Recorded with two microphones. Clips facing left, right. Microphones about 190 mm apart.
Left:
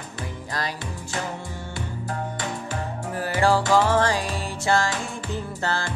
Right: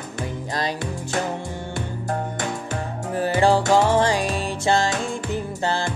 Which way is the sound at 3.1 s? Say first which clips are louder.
Right 3 dB; 25° right (ahead or behind).